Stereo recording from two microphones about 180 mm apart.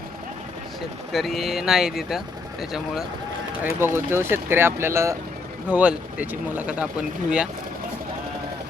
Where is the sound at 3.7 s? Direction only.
15° right (ahead or behind).